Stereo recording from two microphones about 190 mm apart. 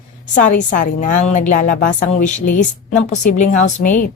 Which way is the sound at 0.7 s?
45° left (ahead or behind).